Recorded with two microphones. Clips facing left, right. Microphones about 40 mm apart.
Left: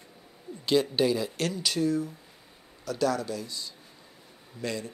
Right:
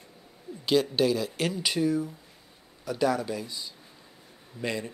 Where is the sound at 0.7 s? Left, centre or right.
Centre.